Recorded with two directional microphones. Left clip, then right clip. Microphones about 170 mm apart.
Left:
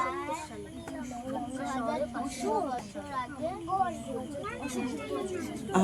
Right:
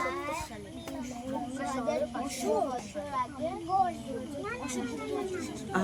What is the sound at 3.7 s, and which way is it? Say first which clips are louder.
Speech: right 2 dB; 45° left (ahead or behind).